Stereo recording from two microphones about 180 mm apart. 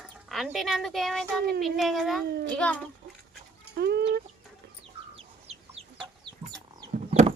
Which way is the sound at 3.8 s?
65° right (ahead or behind).